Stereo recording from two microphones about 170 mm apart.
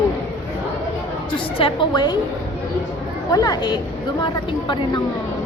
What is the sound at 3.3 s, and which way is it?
Speech, 25° left (ahead or behind).